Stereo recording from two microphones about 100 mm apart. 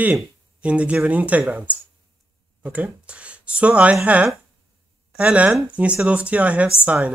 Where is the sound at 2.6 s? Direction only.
10° right (ahead or behind).